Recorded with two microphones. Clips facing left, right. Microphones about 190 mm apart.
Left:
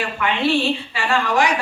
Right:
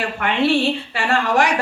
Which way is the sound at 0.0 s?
60° right (ahead or behind).